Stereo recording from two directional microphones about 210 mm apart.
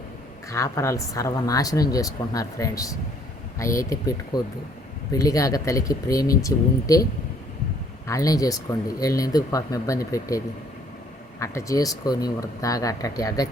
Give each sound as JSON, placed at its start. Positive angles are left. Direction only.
{"t": 0.5, "sound": "speech", "side_deg": 15}